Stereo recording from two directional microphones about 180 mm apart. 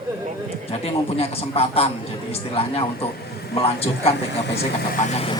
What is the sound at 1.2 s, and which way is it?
A man's voice, 35° left (ahead or behind).